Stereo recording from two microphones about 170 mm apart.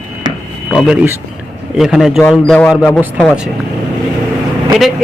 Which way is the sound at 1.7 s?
Centre (ahead or behind).